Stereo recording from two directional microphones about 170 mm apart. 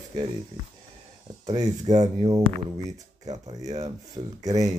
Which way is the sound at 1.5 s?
20° right (ahead or behind).